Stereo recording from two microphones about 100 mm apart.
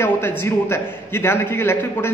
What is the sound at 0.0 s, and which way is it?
A man's voice, 25° left (ahead or behind).